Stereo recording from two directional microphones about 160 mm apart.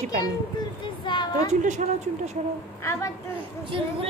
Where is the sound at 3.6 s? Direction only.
30° right (ahead or behind).